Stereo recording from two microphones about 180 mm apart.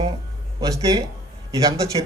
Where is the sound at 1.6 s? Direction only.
20° right (ahead or behind).